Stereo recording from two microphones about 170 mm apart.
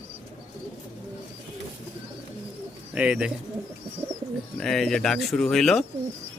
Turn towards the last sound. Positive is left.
turn(degrees=0)  # may be behind; listen again after turning